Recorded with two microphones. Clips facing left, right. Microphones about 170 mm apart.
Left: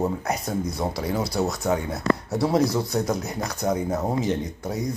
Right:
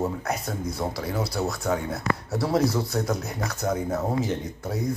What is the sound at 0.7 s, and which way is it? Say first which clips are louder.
Speech: left 2 dB; 20° left (ahead or behind).